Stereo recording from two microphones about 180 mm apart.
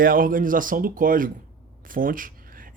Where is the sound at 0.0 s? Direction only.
50° right (ahead or behind).